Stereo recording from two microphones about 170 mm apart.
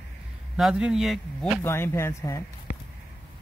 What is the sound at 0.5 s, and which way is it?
Speech, 5° right (ahead or behind).